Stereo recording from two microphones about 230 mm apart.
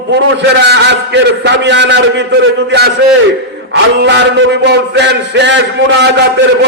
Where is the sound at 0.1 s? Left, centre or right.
Right.